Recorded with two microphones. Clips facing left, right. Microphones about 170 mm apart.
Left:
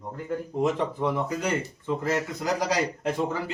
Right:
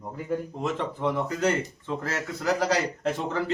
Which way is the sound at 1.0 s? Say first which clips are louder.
Right 1 dB; 10° left (ahead or behind).